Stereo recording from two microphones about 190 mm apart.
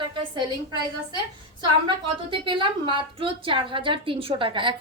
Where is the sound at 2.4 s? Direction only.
25° right (ahead or behind).